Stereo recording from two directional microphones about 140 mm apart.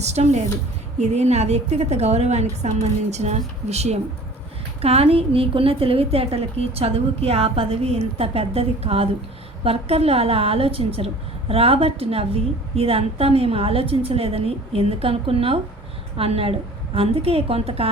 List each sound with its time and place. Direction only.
0.0 s a woman's voice: 50° right (ahead or behind)